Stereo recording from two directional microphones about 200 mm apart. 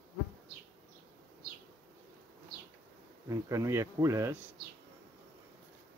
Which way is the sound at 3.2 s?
15° right (ahead or behind).